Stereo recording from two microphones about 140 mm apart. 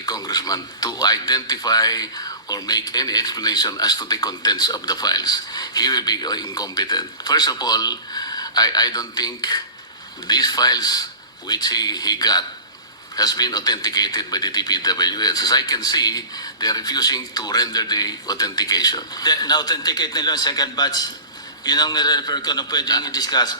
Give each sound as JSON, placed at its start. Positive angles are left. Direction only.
{"t": 0.0, "sound": "speech", "side_deg": 25}